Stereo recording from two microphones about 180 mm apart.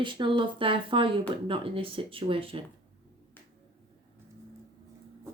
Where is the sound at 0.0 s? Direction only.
25° right (ahead or behind).